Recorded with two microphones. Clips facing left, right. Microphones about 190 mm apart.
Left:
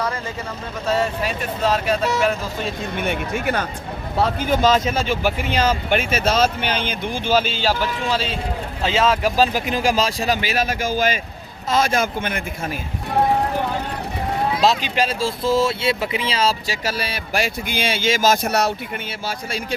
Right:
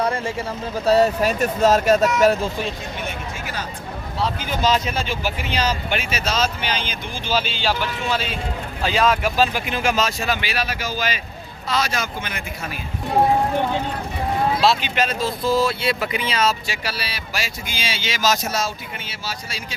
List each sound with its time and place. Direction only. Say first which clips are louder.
0.9 s speech: right 5 dB; 40° right (ahead or behind)
3.0 s speech: left 11 dB; 60° left (ahead or behind); by 9.1 s 25° left (ahead or behind)
9.2 s speech: left 2 dB; 40° left (ahead or behind)
14.6 s speech: left 1 dB; 40° left (ahead or behind)
16.8 s speech: left 4 dB; 50° left (ahead or behind)